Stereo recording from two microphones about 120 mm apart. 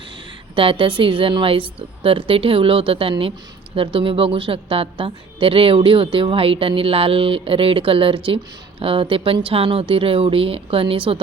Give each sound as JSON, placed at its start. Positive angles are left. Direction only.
{"t": 0.5, "sound": "a woman's voice", "side_deg": -50}